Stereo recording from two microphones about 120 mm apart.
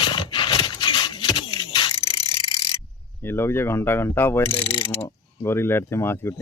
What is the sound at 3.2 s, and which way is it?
Speech, 20° left (ahead or behind).